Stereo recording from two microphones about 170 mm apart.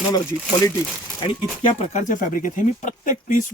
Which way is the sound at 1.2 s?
30° left (ahead or behind).